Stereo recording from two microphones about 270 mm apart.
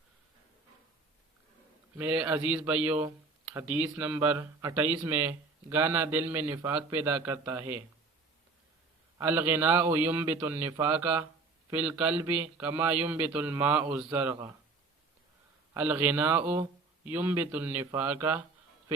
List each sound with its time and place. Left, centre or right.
2.0 s a man's voice: centre
9.1 s a man's voice: centre
15.7 s a man's voice: centre